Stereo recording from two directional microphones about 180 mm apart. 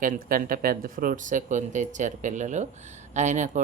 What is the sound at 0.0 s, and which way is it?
Speech, 50° right (ahead or behind).